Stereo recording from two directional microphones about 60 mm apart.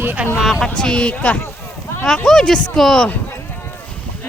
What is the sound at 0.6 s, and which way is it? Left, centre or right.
Speech, centre.